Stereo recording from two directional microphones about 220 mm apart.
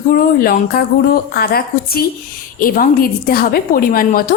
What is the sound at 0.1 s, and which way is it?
A woman's voice, 40° left (ahead or behind).